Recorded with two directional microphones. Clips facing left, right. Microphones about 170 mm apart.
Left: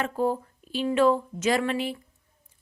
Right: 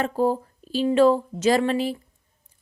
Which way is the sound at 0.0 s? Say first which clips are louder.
Right 4 dB; 35° right (ahead or behind).